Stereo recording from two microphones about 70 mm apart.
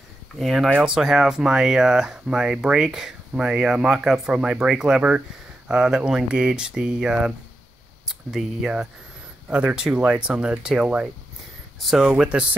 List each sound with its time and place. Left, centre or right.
0.4 s speech: centre
9.5 s speech: centre
11.8 s speech: centre
12.1 s speech: centre